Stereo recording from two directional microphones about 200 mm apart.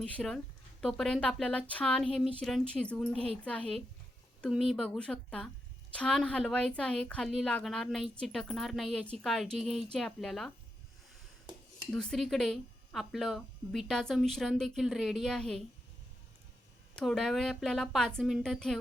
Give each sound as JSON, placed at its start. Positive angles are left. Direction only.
{"t": 0.0, "sound": "a woman's voice", "side_deg": 0}
{"t": 4.4, "sound": "a woman's voice", "side_deg": 0}
{"t": 11.9, "sound": "a woman's voice", "side_deg": 5}
{"t": 17.0, "sound": "a woman's voice", "side_deg": 0}